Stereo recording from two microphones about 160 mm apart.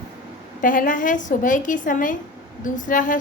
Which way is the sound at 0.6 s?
55° left (ahead or behind).